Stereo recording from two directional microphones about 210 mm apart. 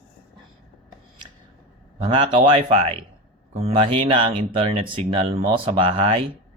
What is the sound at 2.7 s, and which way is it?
Speech, 25° right (ahead or behind).